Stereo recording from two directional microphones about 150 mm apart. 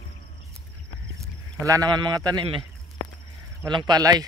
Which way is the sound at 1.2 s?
20° right (ahead or behind).